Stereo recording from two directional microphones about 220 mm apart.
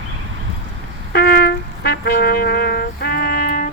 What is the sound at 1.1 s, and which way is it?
Music, 45° left (ahead or behind).